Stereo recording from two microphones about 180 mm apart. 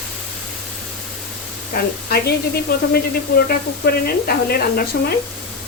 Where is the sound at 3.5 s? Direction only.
55° left (ahead or behind).